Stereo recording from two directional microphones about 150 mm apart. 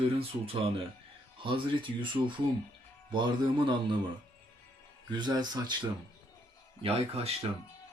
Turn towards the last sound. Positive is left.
turn(degrees=-40)  # may be behind; listen again after turning